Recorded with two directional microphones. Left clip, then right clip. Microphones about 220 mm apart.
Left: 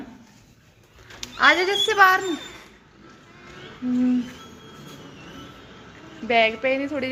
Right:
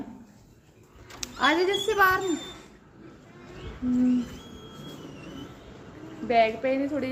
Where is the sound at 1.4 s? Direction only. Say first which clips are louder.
Left 6 dB; 5° left (ahead or behind).